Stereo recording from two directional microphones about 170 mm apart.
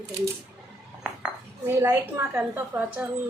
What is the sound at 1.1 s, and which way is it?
Speech, 10° right (ahead or behind).